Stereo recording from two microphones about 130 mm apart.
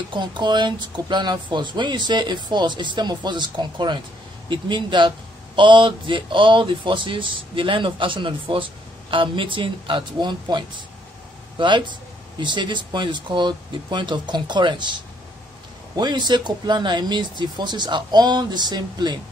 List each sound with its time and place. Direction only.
0.1 s speech: 35° right (ahead or behind)